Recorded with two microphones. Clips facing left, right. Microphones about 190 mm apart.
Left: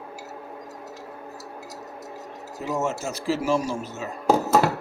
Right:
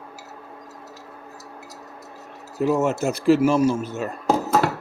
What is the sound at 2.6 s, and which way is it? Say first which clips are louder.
Speech: right 7 dB; 60° right (ahead or behind).